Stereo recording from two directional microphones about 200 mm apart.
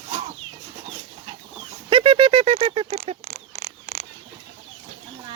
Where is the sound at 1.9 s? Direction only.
25° right (ahead or behind).